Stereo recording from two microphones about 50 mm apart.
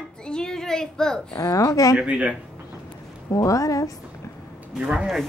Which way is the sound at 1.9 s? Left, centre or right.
Right.